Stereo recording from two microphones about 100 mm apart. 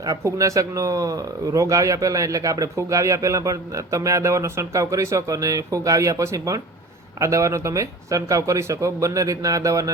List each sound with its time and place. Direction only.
0.0 s speech: 35° right (ahead or behind)